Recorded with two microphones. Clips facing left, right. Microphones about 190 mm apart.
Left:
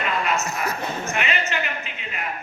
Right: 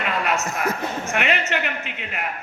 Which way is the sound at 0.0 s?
60° right (ahead or behind).